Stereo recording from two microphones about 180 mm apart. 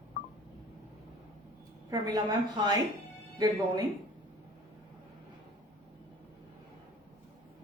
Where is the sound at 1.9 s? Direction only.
20° right (ahead or behind).